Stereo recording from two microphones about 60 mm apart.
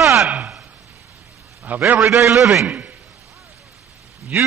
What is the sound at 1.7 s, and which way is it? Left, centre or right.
Speech, right.